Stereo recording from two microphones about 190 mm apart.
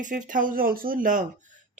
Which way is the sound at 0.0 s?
45° right (ahead or behind).